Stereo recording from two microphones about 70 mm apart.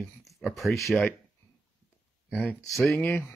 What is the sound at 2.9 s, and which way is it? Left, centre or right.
Speech, left.